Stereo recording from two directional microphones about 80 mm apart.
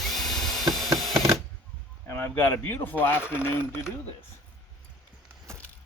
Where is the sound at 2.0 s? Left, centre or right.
Left.